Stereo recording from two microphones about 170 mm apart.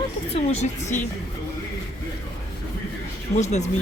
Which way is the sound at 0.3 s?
45° left (ahead or behind).